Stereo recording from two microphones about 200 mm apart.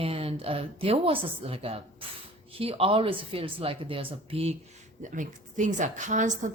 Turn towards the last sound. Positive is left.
turn(degrees=-40)  # may be behind; listen again after turning